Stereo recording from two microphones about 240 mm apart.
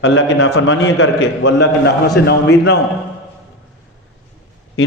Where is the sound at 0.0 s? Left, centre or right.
Left.